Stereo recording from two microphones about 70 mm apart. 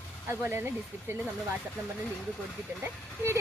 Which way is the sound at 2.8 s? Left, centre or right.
Right.